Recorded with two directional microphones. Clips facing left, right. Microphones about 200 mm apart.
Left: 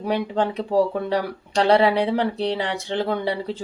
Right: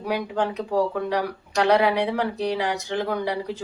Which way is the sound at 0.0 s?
30° left (ahead or behind).